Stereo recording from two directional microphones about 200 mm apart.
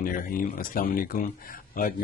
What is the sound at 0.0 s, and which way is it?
Speech, 45° left (ahead or behind).